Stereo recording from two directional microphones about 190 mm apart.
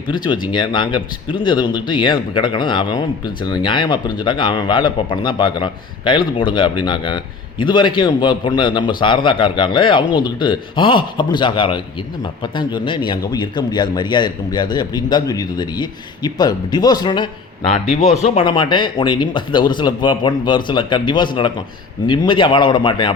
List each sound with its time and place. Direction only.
0.1 s speech: 25° left (ahead or behind)
17.8 s speech: 35° left (ahead or behind)